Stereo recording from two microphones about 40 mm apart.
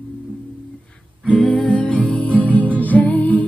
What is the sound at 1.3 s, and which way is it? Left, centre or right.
Music, left.